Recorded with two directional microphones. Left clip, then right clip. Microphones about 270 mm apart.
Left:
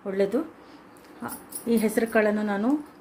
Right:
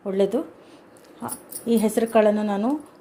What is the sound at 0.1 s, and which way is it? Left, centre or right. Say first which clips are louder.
Speech: right 3 dB; centre.